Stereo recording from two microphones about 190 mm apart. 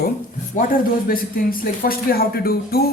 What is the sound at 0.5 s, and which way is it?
Speech, 50° left (ahead or behind).